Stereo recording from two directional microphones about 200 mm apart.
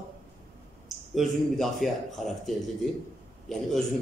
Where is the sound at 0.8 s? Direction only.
Centre (ahead or behind).